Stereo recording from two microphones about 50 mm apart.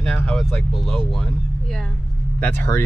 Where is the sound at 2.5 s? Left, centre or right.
Left.